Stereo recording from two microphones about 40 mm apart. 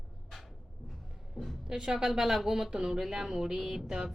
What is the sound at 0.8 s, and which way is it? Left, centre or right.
Music, centre.